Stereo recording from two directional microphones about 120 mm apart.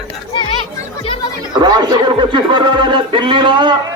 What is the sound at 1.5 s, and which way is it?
A man's voice, 35° right (ahead or behind).